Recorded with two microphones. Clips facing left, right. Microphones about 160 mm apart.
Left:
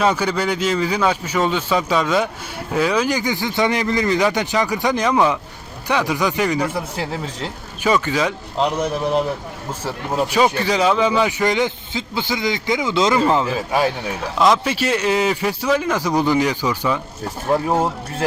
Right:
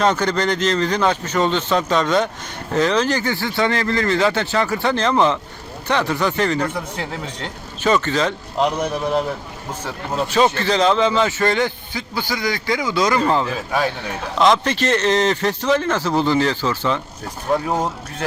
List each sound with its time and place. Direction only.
0.0 s a man's voice: 10° left (ahead or behind)
9.8 s a man's voice: 10° left (ahead or behind)
14.3 s a man's voice: 5° left (ahead or behind)